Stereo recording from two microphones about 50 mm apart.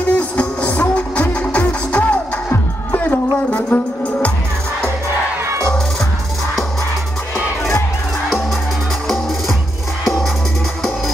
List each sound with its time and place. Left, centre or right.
0.1 s music: left
9.0 s music: centre